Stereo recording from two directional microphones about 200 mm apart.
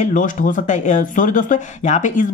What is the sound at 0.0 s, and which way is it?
Speech, 40° left (ahead or behind).